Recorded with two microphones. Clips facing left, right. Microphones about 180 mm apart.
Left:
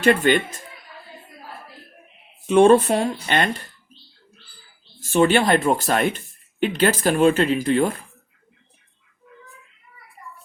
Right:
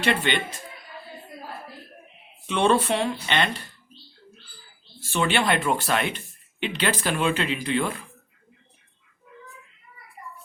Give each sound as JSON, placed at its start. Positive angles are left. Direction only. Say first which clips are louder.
{"t": 0.0, "sound": "speech", "louder": "left 7 dB", "side_deg": 45}
{"t": 2.5, "sound": "speech", "louder": "left 8 dB", "side_deg": 45}
{"t": 4.9, "sound": "speech", "louder": "left 7 dB", "side_deg": 45}